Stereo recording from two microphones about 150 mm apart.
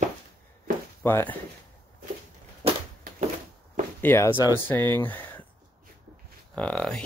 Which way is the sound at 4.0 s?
15° left (ahead or behind).